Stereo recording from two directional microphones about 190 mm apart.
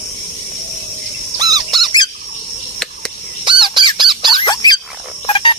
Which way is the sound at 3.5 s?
25° right (ahead or behind).